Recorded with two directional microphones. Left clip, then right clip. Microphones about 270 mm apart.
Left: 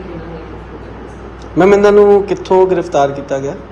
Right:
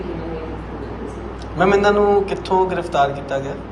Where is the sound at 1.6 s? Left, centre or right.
Left.